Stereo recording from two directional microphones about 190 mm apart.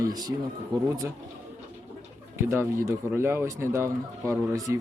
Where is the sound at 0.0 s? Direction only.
20° right (ahead or behind).